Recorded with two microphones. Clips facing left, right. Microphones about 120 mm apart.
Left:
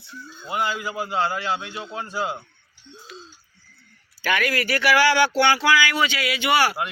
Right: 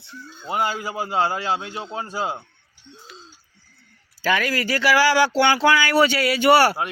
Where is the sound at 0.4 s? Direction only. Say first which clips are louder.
Right 2 dB; 35° right (ahead or behind).